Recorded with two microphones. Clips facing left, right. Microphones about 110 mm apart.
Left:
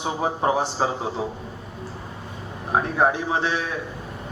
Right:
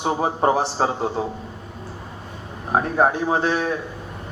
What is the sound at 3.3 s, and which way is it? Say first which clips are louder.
Speech: right 3 dB; 45° right (ahead or behind).